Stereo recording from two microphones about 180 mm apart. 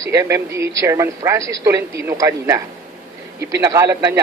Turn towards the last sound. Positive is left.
turn(degrees=-15)  # may be behind; listen again after turning